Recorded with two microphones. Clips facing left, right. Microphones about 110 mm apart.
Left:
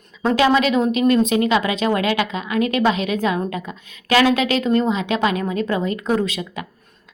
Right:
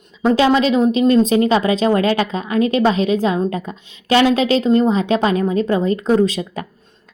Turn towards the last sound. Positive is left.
turn(degrees=-35)  # may be behind; listen again after turning